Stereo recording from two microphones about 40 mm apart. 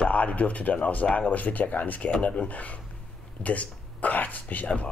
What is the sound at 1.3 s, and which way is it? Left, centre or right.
A man's voice, left.